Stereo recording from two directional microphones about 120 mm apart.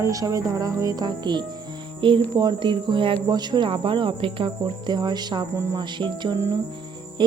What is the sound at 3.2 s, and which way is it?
Cricket, 35° right (ahead or behind).